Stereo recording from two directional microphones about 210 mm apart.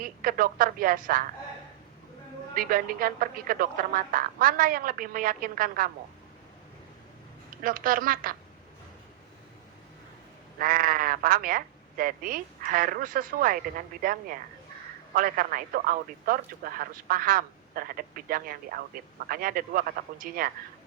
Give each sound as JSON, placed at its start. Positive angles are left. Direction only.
{"t": 0.0, "sound": "speech", "side_deg": -40}
{"t": 2.6, "sound": "speech", "side_deg": -40}
{"t": 7.6, "sound": "speech", "side_deg": -40}
{"t": 10.6, "sound": "speech", "side_deg": -40}